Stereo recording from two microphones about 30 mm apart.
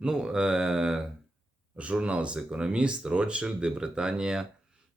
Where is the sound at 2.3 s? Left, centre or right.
Right.